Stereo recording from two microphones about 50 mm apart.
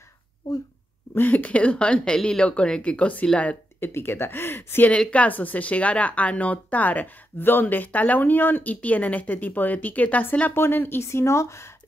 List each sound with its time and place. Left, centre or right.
1.3 s speech: left
3.8 s speech: left
4.9 s speech: left
10.5 s speech: left